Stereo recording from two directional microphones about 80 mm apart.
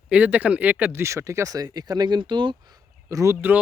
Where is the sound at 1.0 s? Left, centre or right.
Right.